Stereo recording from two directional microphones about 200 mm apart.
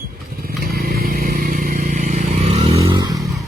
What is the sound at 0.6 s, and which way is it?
Vehicle, 50° right (ahead or behind).